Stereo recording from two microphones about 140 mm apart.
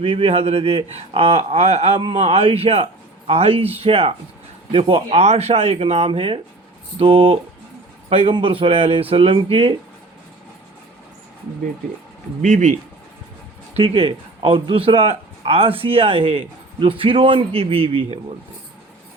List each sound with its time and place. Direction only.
0.0 s speech: 40° right (ahead or behind)
12.4 s speech: 65° right (ahead or behind)
13.7 s speech: 45° right (ahead or behind)